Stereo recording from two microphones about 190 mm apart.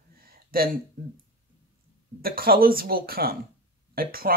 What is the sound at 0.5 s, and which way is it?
Speech, 50° right (ahead or behind).